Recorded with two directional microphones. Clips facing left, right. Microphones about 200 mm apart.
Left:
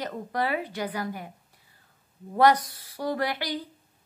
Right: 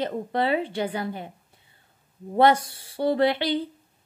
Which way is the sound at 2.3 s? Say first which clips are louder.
Right 2 dB; 25° right (ahead or behind).